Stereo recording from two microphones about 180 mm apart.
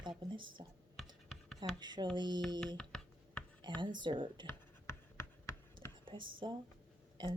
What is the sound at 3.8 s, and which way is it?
Speech, 25° right (ahead or behind).